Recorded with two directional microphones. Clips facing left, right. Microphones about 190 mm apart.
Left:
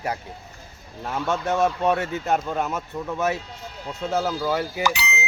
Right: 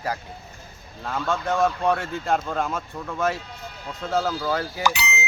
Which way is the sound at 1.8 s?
20° left (ahead or behind).